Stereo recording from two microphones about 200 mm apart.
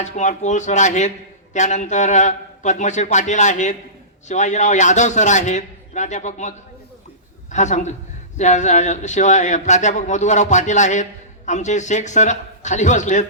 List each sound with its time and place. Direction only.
0.0 s a man's voice: 35° left (ahead or behind)
7.5 s a man's voice: 35° left (ahead or behind)